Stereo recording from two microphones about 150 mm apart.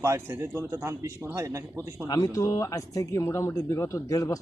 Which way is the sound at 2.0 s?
25° left (ahead or behind).